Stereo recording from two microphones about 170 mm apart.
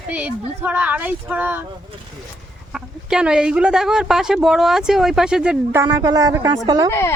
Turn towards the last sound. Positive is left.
turn(degrees=15)  # may be behind; listen again after turning